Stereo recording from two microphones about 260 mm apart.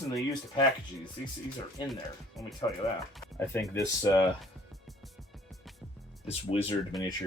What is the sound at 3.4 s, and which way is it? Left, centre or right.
Speech, centre.